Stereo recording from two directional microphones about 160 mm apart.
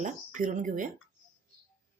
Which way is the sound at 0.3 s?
50° right (ahead or behind).